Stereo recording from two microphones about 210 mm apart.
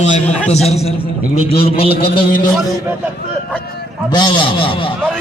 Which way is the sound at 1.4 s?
25° left (ahead or behind).